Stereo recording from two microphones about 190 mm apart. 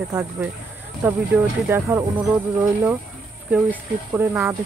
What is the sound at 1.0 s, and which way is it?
Speech, 15° right (ahead or behind).